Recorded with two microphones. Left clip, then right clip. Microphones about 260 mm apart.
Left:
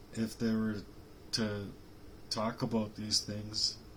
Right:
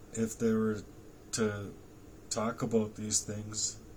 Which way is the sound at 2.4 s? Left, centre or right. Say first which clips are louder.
Right 4 dB; centre.